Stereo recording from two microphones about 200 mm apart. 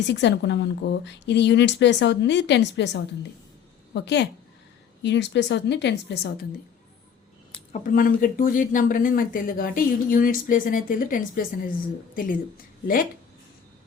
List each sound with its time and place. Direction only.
0.0 s a woman's voice: 60° left (ahead or behind)
7.7 s speech: 40° left (ahead or behind)